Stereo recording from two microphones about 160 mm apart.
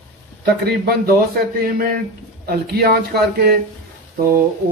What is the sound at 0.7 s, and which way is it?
Speech, 75° right (ahead or behind).